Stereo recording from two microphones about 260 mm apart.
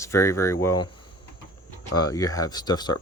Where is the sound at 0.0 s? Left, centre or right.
Centre.